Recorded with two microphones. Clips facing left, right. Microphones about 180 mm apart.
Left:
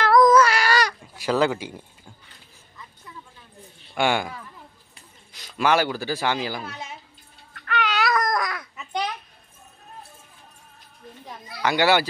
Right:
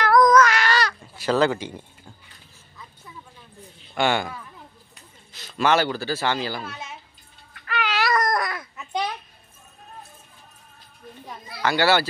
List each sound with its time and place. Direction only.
0.0 s a sound: centre (ahead or behind)
3.9 s speech: 10° left (ahead or behind)
7.5 s babbling: 5° right (ahead or behind)
11.6 s speech: 15° left (ahead or behind)